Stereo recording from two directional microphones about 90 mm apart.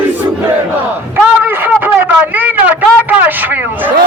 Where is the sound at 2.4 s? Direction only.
20° right (ahead or behind).